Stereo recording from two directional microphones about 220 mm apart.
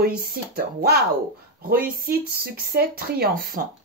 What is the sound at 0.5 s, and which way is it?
Speech, 45° right (ahead or behind).